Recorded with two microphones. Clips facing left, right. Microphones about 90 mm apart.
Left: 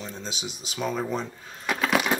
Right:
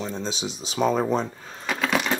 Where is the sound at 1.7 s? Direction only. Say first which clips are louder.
Even; 5° left (ahead or behind).